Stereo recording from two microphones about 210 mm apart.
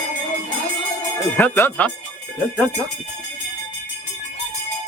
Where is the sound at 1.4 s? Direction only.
10° left (ahead or behind).